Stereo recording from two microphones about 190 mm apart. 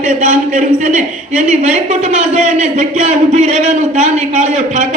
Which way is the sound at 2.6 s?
40° right (ahead or behind).